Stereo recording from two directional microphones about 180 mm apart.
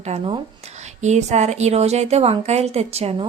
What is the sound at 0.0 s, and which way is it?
A woman's voice, 30° right (ahead or behind).